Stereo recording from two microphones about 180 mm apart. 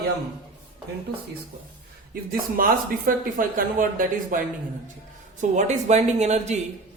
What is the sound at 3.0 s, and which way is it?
Speech, 50° right (ahead or behind).